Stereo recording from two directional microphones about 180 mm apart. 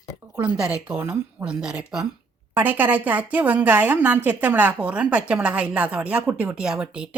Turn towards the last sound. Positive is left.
turn(degrees=-5)  # may be behind; listen again after turning